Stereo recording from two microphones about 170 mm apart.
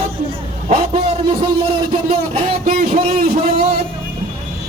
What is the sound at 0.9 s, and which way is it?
Music, 30° right (ahead or behind).